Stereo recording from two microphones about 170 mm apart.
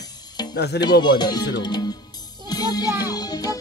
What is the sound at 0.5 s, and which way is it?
Speech, 75° left (ahead or behind).